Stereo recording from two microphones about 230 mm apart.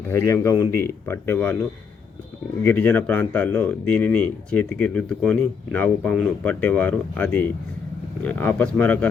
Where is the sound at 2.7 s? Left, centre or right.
Centre.